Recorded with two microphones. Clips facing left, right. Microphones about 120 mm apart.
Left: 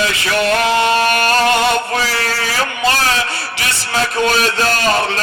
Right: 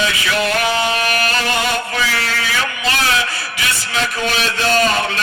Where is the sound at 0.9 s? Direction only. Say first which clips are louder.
Left 5 dB; 35° left (ahead or behind).